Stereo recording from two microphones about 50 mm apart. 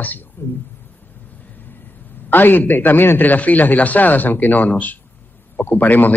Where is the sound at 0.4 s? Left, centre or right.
Left.